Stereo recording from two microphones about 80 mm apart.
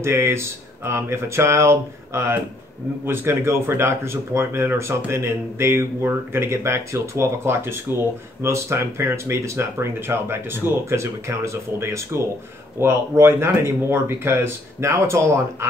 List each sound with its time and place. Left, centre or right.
0.0 s speech: right